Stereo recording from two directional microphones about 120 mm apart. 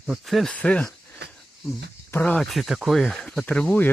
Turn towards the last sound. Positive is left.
turn(degrees=15)  # may be behind; listen again after turning